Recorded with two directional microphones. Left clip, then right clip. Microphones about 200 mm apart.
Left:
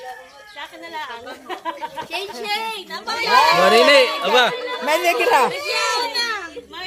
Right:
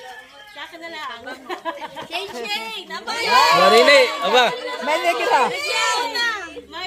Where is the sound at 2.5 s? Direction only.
15° left (ahead or behind).